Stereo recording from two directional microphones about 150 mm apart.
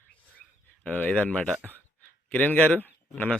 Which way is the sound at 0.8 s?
10° left (ahead or behind).